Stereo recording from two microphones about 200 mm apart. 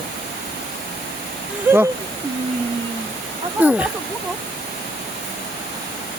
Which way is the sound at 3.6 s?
5° right (ahead or behind).